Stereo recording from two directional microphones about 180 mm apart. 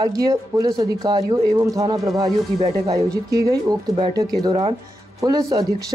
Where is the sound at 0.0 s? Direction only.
20° right (ahead or behind).